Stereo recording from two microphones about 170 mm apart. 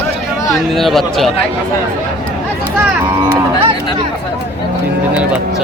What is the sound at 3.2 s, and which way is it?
Speech, 25° right (ahead or behind).